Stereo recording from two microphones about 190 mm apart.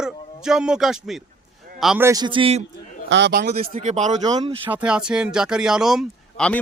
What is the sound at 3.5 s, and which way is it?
Speech, 40° right (ahead or behind).